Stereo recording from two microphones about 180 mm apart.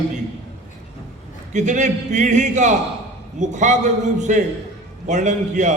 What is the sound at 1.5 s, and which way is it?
A man's voice, 40° right (ahead or behind).